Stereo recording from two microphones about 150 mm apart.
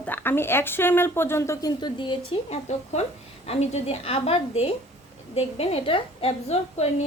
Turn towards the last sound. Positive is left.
turn(degrees=45)  # may be behind; listen again after turning